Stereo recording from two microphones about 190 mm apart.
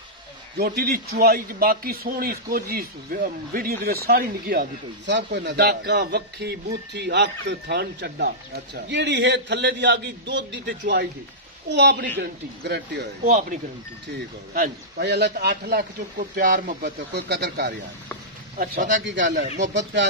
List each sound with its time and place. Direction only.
0.6 s a man's voice: 55° right (ahead or behind)
13.2 s speech: 40° right (ahead or behind)
15.0 s a man's voice: 60° right (ahead or behind)
15.8 s speech: 45° right (ahead or behind)
17.1 s a man's voice: 60° right (ahead or behind)
19.0 s speech: 70° right (ahead or behind)